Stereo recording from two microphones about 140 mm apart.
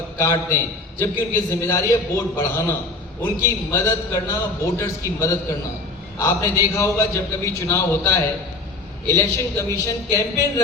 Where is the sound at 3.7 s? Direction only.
20° left (ahead or behind).